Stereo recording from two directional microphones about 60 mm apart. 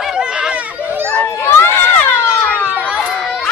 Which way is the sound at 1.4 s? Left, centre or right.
Left.